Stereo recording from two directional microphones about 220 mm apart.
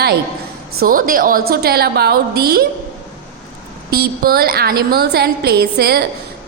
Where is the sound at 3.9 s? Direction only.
45° right (ahead or behind).